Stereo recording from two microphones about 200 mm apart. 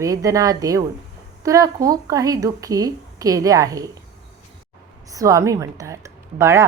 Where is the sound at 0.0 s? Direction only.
15° right (ahead or behind).